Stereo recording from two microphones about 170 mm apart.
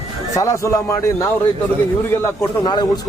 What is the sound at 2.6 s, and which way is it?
Speech, 25° left (ahead or behind).